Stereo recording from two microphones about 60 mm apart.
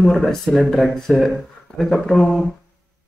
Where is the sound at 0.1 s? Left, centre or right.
Centre.